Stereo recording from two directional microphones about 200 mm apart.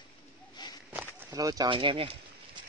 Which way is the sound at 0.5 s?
20° left (ahead or behind).